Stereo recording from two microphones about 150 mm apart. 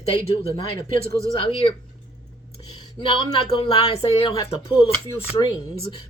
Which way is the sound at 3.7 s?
40° left (ahead or behind).